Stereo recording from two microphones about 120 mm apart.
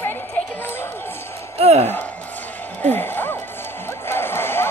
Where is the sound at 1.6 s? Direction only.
60° right (ahead or behind).